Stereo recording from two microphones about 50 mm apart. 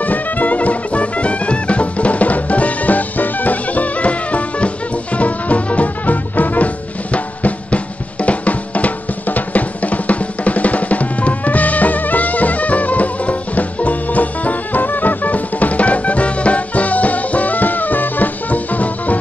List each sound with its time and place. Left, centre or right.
0.0 s music: left